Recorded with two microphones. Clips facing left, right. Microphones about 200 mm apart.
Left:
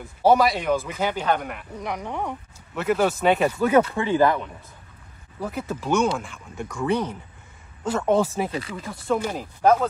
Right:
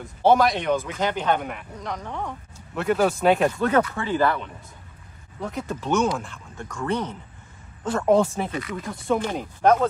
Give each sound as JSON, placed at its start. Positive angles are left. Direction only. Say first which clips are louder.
{"t": 0.2, "sound": "speech", "louder": "even", "side_deg": 5}
{"t": 1.8, "sound": "speech", "louder": "left 3 dB", "side_deg": 10}
{"t": 2.7, "sound": "speech", "louder": "even", "side_deg": 0}
{"t": 5.4, "sound": "speech", "louder": "left 1 dB", "side_deg": 5}
{"t": 8.5, "sound": "speech", "louder": "even", "side_deg": 30}
{"t": 8.8, "sound": "speech", "louder": "even", "side_deg": 0}